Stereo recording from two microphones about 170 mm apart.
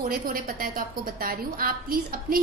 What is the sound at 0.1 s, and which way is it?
A woman's voice, 55° right (ahead or behind).